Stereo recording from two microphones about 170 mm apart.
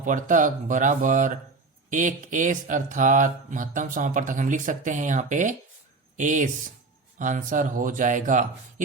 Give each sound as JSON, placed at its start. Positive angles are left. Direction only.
{"t": 0.0, "sound": "speech", "side_deg": -50}